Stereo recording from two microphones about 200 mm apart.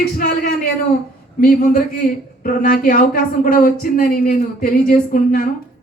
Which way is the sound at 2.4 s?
45° left (ahead or behind).